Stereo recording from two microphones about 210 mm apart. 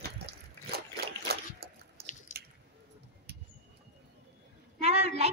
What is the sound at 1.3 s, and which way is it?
Boat, 50° right (ahead or behind).